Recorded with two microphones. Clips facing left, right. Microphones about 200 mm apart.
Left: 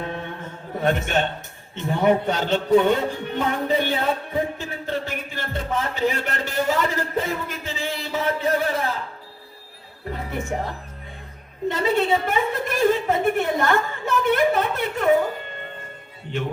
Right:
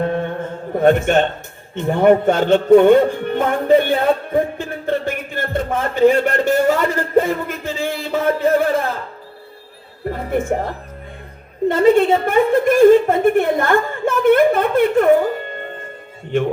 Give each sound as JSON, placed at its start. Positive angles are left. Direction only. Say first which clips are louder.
{"t": 0.0, "sound": "music", "louder": "right 10 dB", "side_deg": -50}
{"t": 10.1, "sound": "a woman's voice", "louder": "right 8 dB", "side_deg": -50}